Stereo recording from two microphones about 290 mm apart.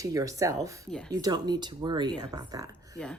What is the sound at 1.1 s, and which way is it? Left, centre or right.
Speech, centre.